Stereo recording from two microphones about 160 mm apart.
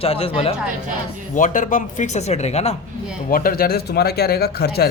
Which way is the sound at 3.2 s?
65° left (ahead or behind).